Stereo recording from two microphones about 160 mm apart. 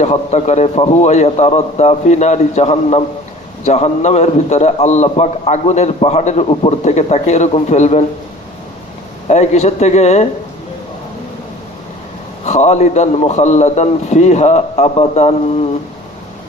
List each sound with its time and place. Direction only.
0.0 s a man's voice: 45° left (ahead or behind)
9.2 s a man's voice: 45° left (ahead or behind)
12.5 s a man's voice: 45° left (ahead or behind)